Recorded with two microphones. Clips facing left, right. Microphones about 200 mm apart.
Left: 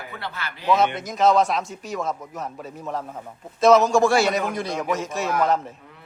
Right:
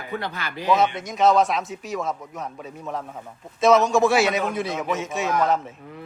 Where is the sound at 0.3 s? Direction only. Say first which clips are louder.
Left 1 dB; 15° right (ahead or behind).